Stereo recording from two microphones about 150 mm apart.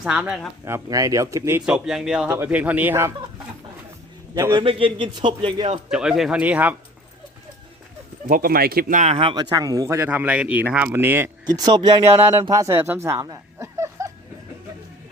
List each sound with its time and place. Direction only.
0.0 s speech: 5° right (ahead or behind)
0.6 s speech: 20° right (ahead or behind)
4.5 s a man's voice: 35° right (ahead or behind)
5.9 s speech: 5° right (ahead or behind)
8.3 s speech: 75° right (ahead or behind); by 9.3 s 45° right (ahead or behind)
9.3 s speech: 30° right (ahead or behind)
11.5 s speech: 25° right (ahead or behind)
13.2 s a sound: 20° right (ahead or behind)